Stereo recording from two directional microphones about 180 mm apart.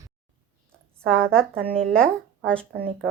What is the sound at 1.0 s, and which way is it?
Speech, 5° left (ahead or behind).